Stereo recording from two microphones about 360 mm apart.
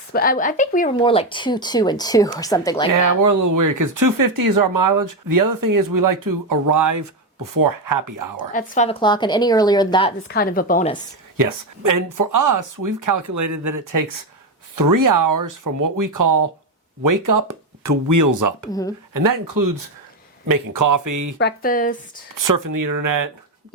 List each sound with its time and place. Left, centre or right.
0.1 s speech: left
3.0 s speech: right
8.5 s speech: left
10.3 s speech: left
11.3 s speech: right
18.7 s speech: centre
19.1 s speech: right
21.3 s speech: left
22.4 s speech: right